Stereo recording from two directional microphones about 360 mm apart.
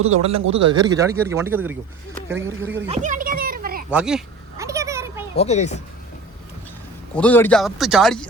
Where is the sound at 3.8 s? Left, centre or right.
Centre.